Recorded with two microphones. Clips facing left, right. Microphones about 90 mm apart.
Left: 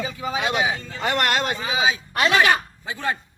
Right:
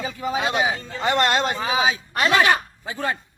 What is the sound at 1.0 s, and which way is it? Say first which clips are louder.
Speech: right 2 dB; 20° right (ahead or behind).